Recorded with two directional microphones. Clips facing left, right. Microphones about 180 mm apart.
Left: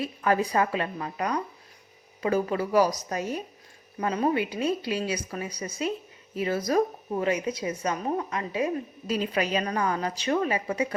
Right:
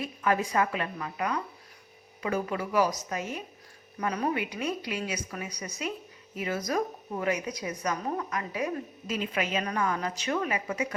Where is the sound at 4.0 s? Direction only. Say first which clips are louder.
Left 4 dB; 25° left (ahead or behind).